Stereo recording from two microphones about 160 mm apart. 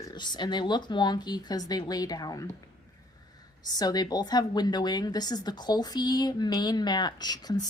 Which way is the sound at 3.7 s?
25° left (ahead or behind).